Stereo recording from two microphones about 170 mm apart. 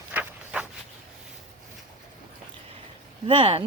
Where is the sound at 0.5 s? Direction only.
5° right (ahead or behind).